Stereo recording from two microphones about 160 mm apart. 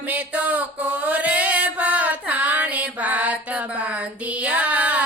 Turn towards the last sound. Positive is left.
turn(degrees=-10)  # may be behind; listen again after turning